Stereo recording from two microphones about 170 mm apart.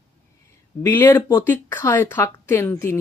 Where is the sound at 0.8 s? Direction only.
10° left (ahead or behind).